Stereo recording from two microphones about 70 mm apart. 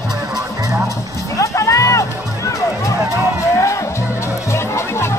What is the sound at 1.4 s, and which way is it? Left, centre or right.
Music, left.